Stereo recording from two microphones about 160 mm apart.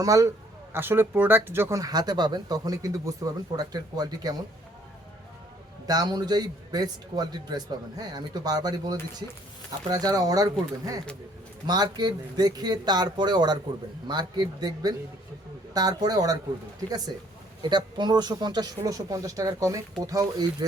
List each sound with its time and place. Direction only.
0.0 s speech: 20° right (ahead or behind)
5.8 s speech: 25° right (ahead or behind)